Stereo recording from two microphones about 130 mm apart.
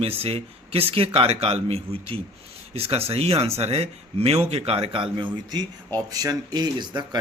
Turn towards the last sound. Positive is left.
turn(degrees=-30)  # may be behind; listen again after turning